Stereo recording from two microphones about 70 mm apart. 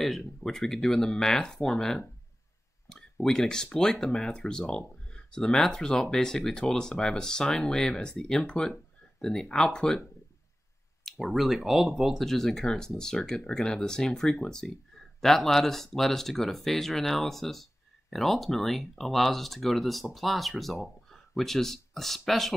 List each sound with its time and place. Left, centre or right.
0.4 s speech: centre
11.1 s speech: centre